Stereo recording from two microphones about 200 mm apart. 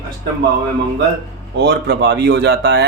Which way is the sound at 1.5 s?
55° right (ahead or behind).